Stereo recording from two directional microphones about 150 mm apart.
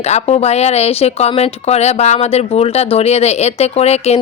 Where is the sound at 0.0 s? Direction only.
45° left (ahead or behind).